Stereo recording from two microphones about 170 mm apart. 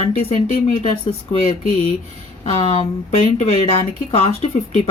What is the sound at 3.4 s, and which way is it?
Speech, 40° left (ahead or behind).